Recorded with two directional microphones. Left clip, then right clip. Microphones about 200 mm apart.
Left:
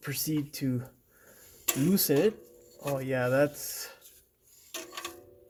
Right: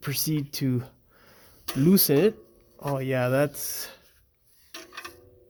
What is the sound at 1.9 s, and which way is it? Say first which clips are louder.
Speech: right 4 dB; 55° right (ahead or behind).